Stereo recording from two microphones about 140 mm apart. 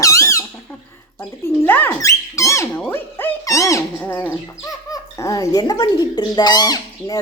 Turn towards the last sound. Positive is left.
turn(degrees=30)  # may be behind; listen again after turning